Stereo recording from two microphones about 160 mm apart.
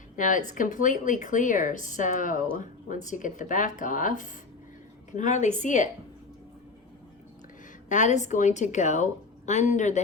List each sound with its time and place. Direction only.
0.2 s speech: 55° left (ahead or behind)
7.9 s speech: 50° left (ahead or behind)